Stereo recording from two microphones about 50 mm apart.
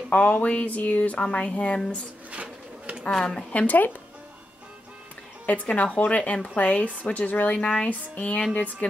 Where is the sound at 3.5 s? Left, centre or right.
Left.